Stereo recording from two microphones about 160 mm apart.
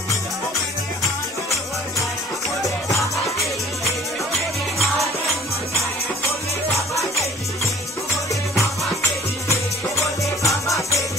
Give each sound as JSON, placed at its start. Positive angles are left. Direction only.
{"t": 9.5, "sound": "music", "side_deg": 20}